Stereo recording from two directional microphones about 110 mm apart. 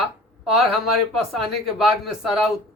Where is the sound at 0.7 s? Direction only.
5° right (ahead or behind).